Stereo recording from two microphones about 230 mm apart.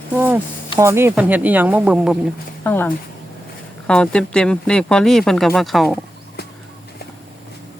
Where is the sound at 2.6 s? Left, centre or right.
Centre.